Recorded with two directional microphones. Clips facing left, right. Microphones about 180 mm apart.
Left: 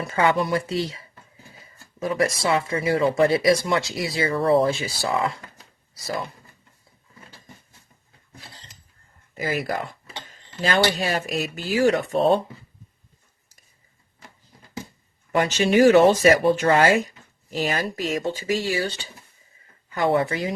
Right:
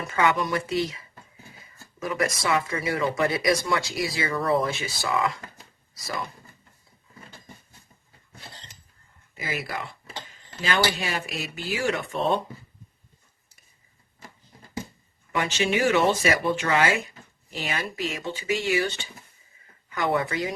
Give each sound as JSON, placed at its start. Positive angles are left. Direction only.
{"t": 0.0, "sound": "speech", "side_deg": 30}
{"t": 9.4, "sound": "speech", "side_deg": 40}
{"t": 15.3, "sound": "speech", "side_deg": 40}